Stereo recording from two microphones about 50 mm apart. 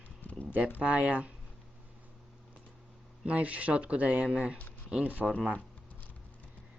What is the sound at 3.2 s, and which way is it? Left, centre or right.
Speech, right.